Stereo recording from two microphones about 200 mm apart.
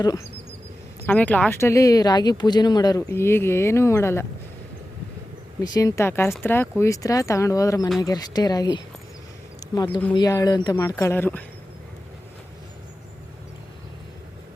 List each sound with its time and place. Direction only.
1.0 s speech: 10° left (ahead or behind)
5.6 s speech: 20° left (ahead or behind)